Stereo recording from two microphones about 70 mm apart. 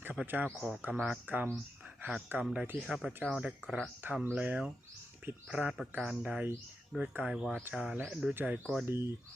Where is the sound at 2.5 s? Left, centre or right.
Right.